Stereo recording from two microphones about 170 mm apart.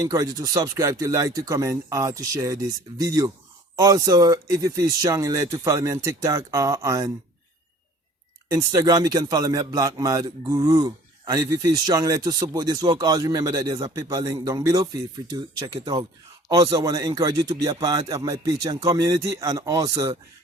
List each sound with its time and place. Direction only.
0.0 s a man's voice: 20° right (ahead or behind)
8.4 s a man's voice: 20° right (ahead or behind)